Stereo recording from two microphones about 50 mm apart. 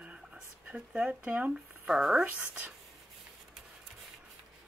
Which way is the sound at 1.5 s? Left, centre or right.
Centre.